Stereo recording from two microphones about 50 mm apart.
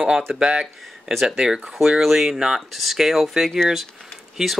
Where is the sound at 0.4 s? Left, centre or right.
Centre.